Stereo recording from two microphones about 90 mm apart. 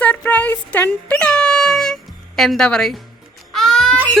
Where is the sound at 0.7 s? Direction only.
10° left (ahead or behind).